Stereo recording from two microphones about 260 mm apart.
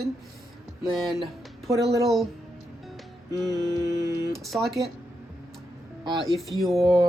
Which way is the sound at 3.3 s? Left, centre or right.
Centre.